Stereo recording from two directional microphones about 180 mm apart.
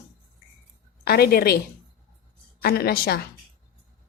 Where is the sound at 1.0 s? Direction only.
60° left (ahead or behind).